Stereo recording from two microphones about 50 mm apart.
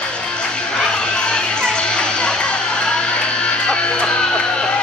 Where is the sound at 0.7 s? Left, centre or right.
Centre.